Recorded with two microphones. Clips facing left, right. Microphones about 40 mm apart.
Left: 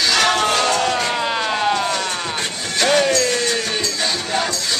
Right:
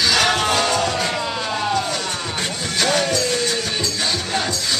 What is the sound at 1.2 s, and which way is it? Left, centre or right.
Vehicle, left.